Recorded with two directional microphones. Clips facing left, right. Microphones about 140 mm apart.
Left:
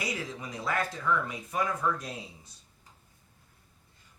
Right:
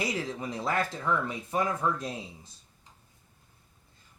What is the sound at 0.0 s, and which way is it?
Speech, 25° right (ahead or behind).